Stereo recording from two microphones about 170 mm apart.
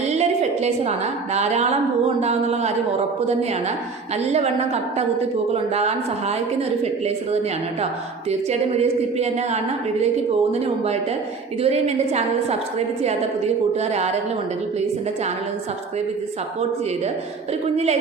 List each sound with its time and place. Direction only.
0.1 s a woman's voice: 40° right (ahead or behind)
4.2 s a woman's voice: 40° right (ahead or behind)
11.6 s a woman's voice: 40° right (ahead or behind)